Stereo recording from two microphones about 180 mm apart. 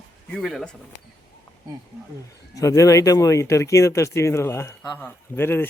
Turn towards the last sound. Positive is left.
turn(degrees=10)  # may be behind; listen again after turning